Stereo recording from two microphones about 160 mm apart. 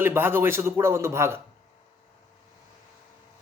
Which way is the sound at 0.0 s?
15° right (ahead or behind).